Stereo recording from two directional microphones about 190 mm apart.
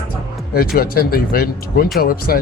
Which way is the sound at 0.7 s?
50° left (ahead or behind).